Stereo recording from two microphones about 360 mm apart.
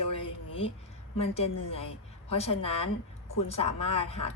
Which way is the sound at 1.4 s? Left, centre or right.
Left.